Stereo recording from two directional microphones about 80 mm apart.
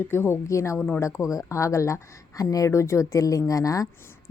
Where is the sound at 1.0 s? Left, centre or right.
Left.